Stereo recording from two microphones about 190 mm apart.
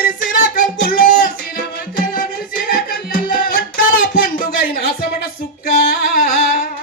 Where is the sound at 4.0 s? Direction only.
50° left (ahead or behind).